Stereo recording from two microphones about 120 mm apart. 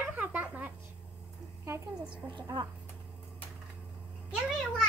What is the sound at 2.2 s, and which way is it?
Speech, 40° right (ahead or behind).